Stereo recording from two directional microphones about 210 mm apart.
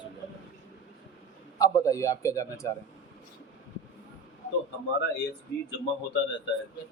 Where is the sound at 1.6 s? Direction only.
15° left (ahead or behind).